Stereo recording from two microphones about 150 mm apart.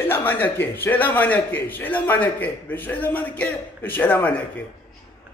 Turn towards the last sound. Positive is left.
turn(degrees=10)  # may be behind; listen again after turning